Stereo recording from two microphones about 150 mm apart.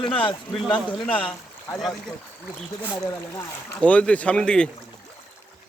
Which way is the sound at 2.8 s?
15° left (ahead or behind).